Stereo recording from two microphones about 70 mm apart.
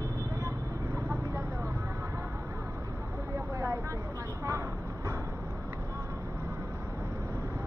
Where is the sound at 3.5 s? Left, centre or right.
Right.